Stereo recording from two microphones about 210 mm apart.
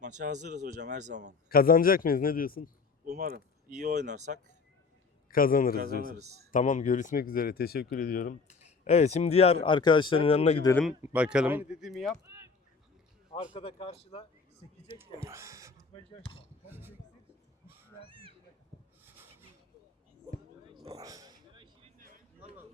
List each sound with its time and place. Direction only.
0.0 s speech: 35° right (ahead or behind)
1.5 s a man's voice: 45° left (ahead or behind)
3.2 s speech: 45° right (ahead or behind)
5.3 s a man's voice: 40° left (ahead or behind)
11.0 s speech: 5° right (ahead or behind)
12.2 s a sound: 15° right (ahead or behind)
13.3 s speech: 25° left (ahead or behind)
14.8 s speech: 15° right (ahead or behind)
18.1 s cat: 25° right (ahead or behind)
19.0 s rub: 10° right (ahead or behind)
20.9 s a sound: 15° right (ahead or behind)
21.9 s a sound: 40° right (ahead or behind)